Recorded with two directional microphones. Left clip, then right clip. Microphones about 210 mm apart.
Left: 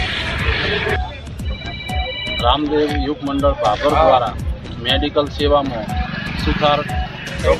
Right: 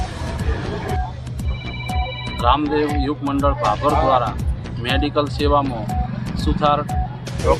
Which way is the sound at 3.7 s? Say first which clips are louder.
Left 5 dB; 15° right (ahead or behind).